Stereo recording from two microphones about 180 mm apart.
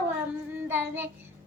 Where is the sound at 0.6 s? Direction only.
10° right (ahead or behind).